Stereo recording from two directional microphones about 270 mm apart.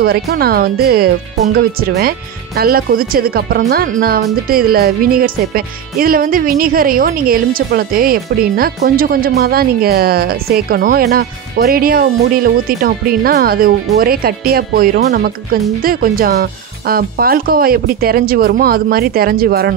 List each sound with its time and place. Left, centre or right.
0.0 s speech: right